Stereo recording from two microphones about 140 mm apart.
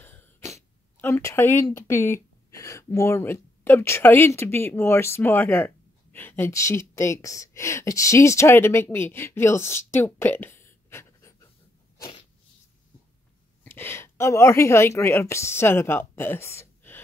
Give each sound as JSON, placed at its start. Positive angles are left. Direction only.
{"t": 0.0, "sound": "cough", "side_deg": 15}
{"t": 1.0, "sound": "speech", "side_deg": 15}
{"t": 13.7, "sound": "a woman's voice", "side_deg": 15}